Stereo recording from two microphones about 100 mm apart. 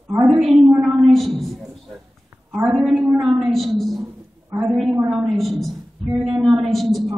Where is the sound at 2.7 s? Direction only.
5° right (ahead or behind).